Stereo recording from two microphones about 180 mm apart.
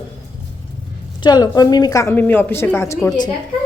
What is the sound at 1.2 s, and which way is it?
A woman's voice, 25° left (ahead or behind).